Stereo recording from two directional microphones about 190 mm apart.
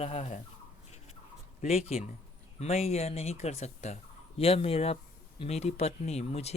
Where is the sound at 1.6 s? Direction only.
35° left (ahead or behind).